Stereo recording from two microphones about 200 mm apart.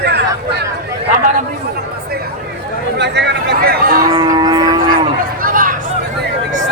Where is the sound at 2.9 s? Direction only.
60° right (ahead or behind).